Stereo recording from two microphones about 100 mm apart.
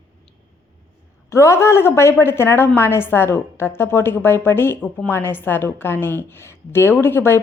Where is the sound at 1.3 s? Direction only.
30° left (ahead or behind).